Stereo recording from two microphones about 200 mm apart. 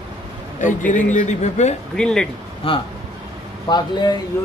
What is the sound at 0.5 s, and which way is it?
A man's voice, 40° left (ahead or behind).